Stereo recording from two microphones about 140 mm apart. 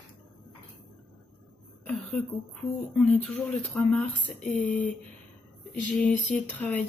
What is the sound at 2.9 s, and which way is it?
Speech, 5° left (ahead or behind).